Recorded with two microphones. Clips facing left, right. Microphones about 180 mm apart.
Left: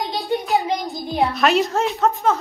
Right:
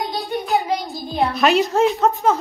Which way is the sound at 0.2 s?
Centre (ahead or behind).